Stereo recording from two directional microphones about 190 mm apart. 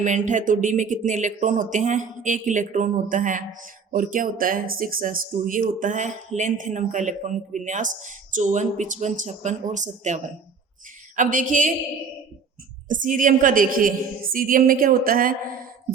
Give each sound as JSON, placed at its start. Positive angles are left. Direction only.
{"t": 0.0, "sound": "speech", "side_deg": -40}
{"t": 12.9, "sound": "speech", "side_deg": -45}